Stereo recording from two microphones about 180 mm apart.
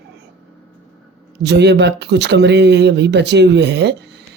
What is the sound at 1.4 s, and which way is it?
Speech, 70° right (ahead or behind).